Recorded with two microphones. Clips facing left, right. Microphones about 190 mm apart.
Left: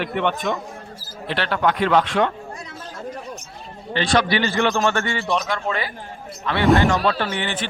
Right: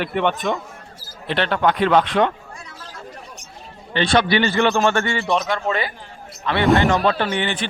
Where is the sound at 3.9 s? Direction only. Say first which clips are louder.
Right 2 dB; 25° right (ahead or behind).